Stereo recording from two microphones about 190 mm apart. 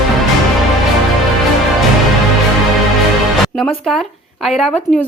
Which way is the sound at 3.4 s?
Centre (ahead or behind).